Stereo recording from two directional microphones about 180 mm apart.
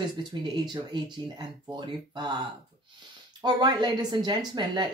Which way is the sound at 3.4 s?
25° right (ahead or behind).